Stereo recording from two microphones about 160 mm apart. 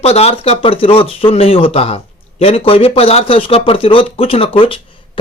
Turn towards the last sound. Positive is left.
turn(degrees=35)  # may be behind; listen again after turning